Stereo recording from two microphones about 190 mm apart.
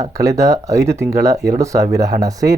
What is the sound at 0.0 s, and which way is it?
Speech, 15° right (ahead or behind).